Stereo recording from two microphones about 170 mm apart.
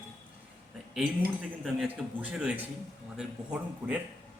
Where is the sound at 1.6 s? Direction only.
Centre (ahead or behind).